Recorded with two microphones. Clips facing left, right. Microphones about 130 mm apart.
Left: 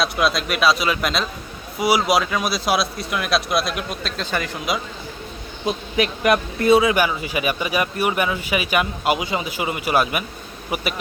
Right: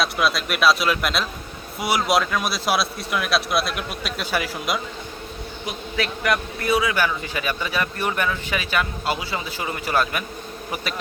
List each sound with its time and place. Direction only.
0.0 s speech: centre (ahead or behind)
5.6 s a man's voice: 20° left (ahead or behind)
7.0 s speech: 15° left (ahead or behind)